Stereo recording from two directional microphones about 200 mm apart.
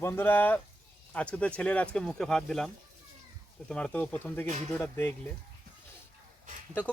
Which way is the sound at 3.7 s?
5° left (ahead or behind).